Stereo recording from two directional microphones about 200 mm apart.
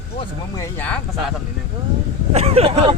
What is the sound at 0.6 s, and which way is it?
Speech, 10° left (ahead or behind).